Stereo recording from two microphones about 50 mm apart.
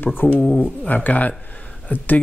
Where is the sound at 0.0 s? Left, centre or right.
Left.